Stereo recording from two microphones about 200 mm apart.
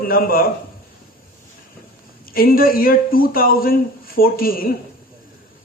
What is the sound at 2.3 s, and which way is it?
A man's voice, 45° left (ahead or behind).